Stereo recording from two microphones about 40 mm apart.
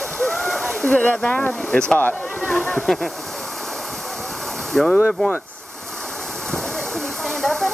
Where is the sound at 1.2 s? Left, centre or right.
Left.